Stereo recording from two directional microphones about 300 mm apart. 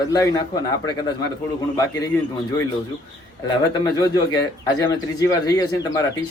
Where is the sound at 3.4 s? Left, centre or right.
Centre.